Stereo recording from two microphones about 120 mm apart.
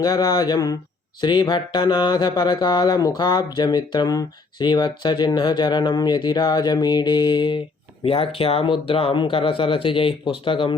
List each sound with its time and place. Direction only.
0.0 s speech: 30° left (ahead or behind)